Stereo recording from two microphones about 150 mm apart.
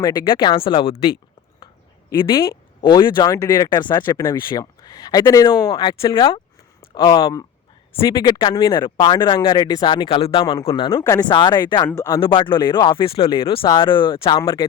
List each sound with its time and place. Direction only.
0.0 s speech: 30° left (ahead or behind)
1.6 s a sound: 20° left (ahead or behind)
2.8 s speech: 30° left (ahead or behind)
11.9 s speech: 20° left (ahead or behind)
12.2 s speech: 35° left (ahead or behind)